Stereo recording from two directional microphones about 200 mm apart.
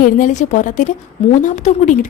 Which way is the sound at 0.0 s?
40° left (ahead or behind).